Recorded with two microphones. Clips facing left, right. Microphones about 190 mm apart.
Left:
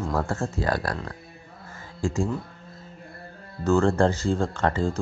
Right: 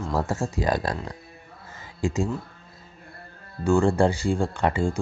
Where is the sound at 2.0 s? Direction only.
20° right (ahead or behind).